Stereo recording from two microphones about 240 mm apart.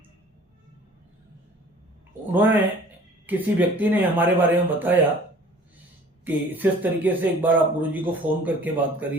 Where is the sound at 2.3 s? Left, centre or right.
Centre.